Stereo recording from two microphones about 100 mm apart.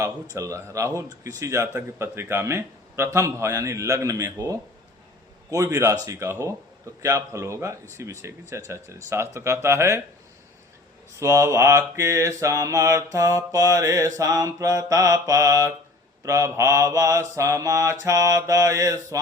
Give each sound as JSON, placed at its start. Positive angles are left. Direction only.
{"t": 0.3, "sound": "mantra", "side_deg": -30}
{"t": 2.0, "sound": "a man's voice", "side_deg": -25}
{"t": 5.5, "sound": "mantra", "side_deg": -35}
{"t": 7.9, "sound": "a man's voice", "side_deg": -30}
{"t": 11.2, "sound": "mantra", "side_deg": -30}